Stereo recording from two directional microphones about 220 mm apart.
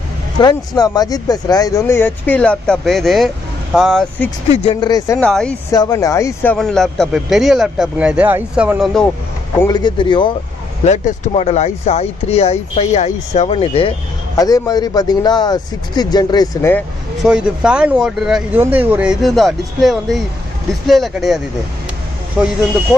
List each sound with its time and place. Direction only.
0.4 s speech: 20° left (ahead or behind); by 4.3 s centre (ahead or behind)
4.5 s speech: 25° left (ahead or behind)
5.2 s speech: 5° left (ahead or behind)
5.7 s speech: 15° left (ahead or behind); by 9.0 s centre (ahead or behind)
9.6 s speech: 20° left (ahead or behind)
16.7 s speech: centre (ahead or behind)